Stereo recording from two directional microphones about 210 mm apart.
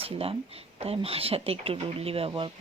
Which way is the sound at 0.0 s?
25° right (ahead or behind).